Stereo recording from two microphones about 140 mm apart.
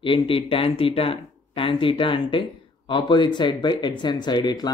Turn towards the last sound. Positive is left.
turn(degrees=30)  # may be behind; listen again after turning